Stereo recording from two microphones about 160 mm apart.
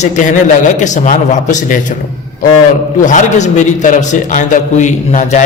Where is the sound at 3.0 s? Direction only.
50° left (ahead or behind).